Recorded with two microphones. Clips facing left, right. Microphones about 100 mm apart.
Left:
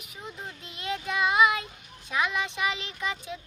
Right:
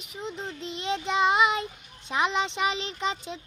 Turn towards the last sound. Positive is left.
turn(degrees=-25)  # may be behind; listen again after turning